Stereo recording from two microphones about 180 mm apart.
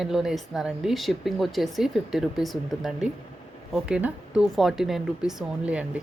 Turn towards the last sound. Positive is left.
turn(degrees=-5)  # may be behind; listen again after turning